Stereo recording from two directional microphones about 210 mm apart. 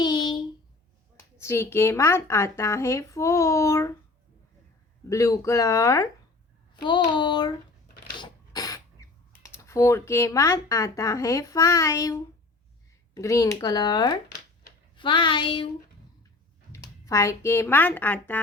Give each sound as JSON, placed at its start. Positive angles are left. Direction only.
{"t": 0.0, "sound": "a sound", "side_deg": 20}
{"t": 1.1, "sound": "speech", "side_deg": 15}
{"t": 5.0, "sound": "speech", "side_deg": 15}
{"t": 8.2, "sound": "a sound", "side_deg": 15}
{"t": 9.3, "sound": "speech", "side_deg": 15}
{"t": 16.7, "sound": "speech", "side_deg": 15}